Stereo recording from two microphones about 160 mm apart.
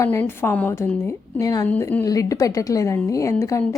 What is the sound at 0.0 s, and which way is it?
Speech, 15° left (ahead or behind).